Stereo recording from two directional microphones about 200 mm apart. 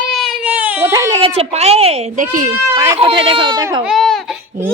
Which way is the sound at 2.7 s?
15° right (ahead or behind).